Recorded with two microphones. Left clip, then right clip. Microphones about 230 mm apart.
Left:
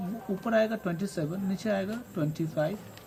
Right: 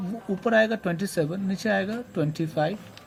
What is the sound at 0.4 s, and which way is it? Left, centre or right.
Speech, right.